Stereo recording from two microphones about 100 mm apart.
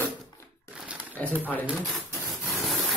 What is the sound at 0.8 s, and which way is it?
Crumpling, 15° right (ahead or behind).